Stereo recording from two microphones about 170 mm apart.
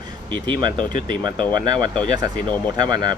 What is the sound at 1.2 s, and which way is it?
Speech, 25° right (ahead or behind).